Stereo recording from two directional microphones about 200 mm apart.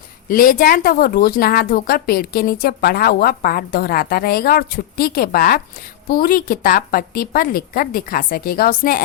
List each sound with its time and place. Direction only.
0.3 s speech: 45° left (ahead or behind)